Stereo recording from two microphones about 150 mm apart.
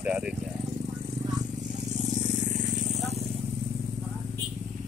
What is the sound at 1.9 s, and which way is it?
Vehicle, 55° right (ahead or behind).